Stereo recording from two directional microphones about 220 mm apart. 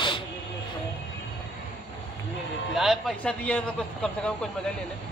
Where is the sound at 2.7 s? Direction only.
Centre (ahead or behind).